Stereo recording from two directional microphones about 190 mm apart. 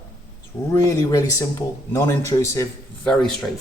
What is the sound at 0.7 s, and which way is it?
Speech, 15° left (ahead or behind).